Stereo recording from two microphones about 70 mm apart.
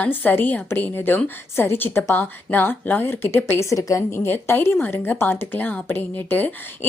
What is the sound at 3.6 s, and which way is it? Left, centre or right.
Speech, left.